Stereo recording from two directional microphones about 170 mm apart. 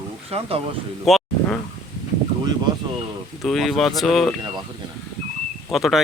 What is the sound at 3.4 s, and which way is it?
Speech, centre (ahead or behind).